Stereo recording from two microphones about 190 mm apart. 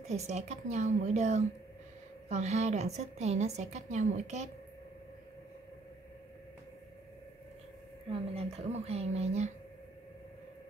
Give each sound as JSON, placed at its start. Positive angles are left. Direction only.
{"t": 0.1, "sound": "a woman's voice", "side_deg": -35}
{"t": 8.1, "sound": "a woman's voice", "side_deg": -30}